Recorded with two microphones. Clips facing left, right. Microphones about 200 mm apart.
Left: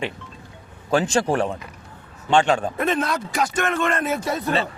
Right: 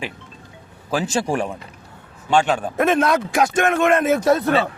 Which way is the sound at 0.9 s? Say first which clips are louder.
Left 2 dB; 5° right (ahead or behind).